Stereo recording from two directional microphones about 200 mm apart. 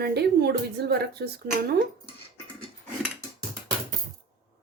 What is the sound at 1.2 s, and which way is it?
Speech, 55° right (ahead or behind).